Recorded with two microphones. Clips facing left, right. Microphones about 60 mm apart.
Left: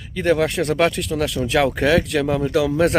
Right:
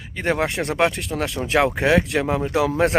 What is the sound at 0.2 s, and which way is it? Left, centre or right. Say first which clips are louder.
Speech: left 4 dB; right.